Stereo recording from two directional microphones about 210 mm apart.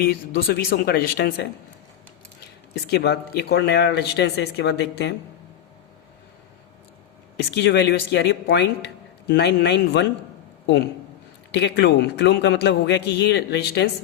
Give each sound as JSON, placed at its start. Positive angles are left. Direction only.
{"t": 0.0, "sound": "speech", "side_deg": 45}
{"t": 2.8, "sound": "speech", "side_deg": 50}
{"t": 7.5, "sound": "speech", "side_deg": 55}
{"t": 11.5, "sound": "speech", "side_deg": 55}